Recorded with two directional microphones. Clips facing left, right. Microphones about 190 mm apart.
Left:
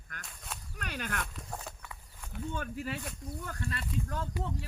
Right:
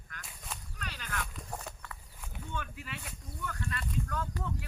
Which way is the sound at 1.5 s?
5° left (ahead or behind).